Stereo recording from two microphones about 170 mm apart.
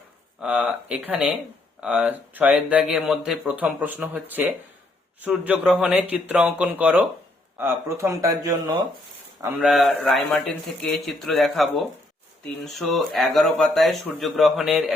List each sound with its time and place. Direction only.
0.4 s speech: 5° right (ahead or behind)
9.6 s speech: centre (ahead or behind)